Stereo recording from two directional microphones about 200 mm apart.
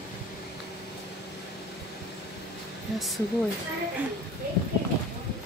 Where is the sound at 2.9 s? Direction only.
Centre (ahead or behind).